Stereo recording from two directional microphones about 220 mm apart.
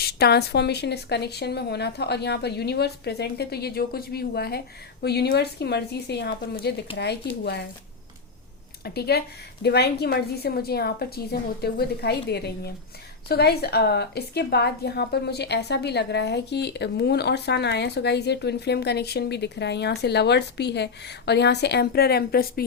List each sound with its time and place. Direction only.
0.0 s a woman's voice: 45° left (ahead or behind)
8.8 s a woman's voice: 45° left (ahead or behind)